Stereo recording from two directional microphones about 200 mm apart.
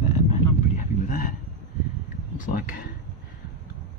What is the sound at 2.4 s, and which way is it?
Speech, 40° left (ahead or behind).